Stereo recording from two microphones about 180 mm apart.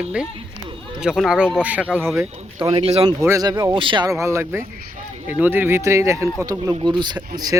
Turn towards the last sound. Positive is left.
turn(degrees=-20)  # may be behind; listen again after turning